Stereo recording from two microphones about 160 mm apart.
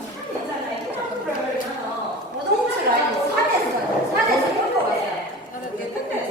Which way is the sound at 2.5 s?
90° right.